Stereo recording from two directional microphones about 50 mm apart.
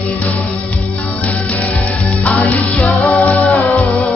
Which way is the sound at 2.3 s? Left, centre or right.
Left.